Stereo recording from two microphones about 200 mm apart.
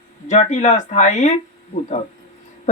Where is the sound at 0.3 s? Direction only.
35° left (ahead or behind).